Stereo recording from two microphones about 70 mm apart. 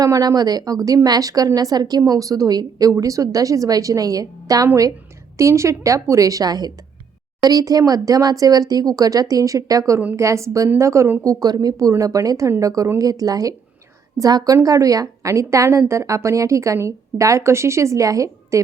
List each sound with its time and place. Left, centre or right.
0.0 s speech: right
3.0 s speech: right
11.2 s speech: right